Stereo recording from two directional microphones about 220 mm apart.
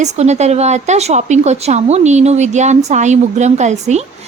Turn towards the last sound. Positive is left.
turn(degrees=-30)  # may be behind; listen again after turning